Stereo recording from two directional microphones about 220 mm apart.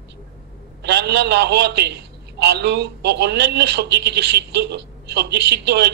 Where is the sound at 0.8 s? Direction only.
50° right (ahead or behind).